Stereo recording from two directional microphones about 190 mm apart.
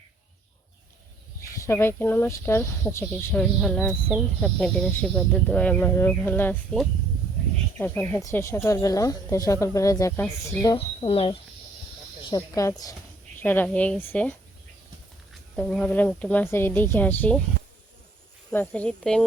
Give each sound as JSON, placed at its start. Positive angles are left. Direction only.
{"t": 1.4, "sound": "speech", "side_deg": 15}
{"t": 10.8, "sound": "speech", "side_deg": 30}
{"t": 12.2, "sound": "speech", "side_deg": 20}
{"t": 18.5, "sound": "speech", "side_deg": 5}